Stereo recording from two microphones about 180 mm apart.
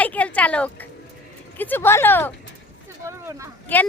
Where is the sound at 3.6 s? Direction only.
10° left (ahead or behind).